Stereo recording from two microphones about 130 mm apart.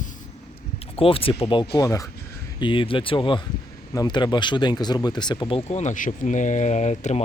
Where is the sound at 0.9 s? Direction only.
45° left (ahead or behind).